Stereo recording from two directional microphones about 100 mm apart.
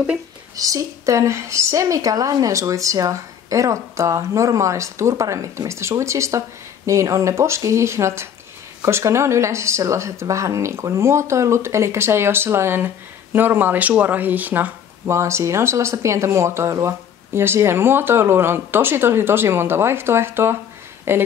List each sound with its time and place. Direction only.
0.6 s a woman's voice: 35° right (ahead or behind)